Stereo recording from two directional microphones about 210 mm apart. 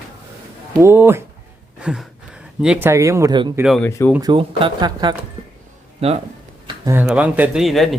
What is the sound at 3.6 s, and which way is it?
Speech, centre (ahead or behind).